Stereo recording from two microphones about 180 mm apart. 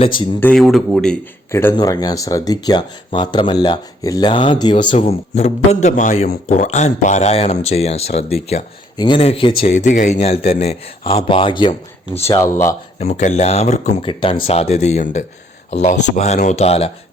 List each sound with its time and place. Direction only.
0.0 s speech: 25° left (ahead or behind)
0.3 s speech: 5° left (ahead or behind)
1.5 s speech: 15° left (ahead or behind)
4.9 s speech: 35° left (ahead or behind)
12.4 s speech: 15° left (ahead or behind)
13.0 s speech: 40° left (ahead or behind)